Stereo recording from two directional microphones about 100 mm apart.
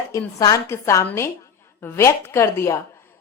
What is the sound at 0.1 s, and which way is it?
A woman's voice, 35° left (ahead or behind).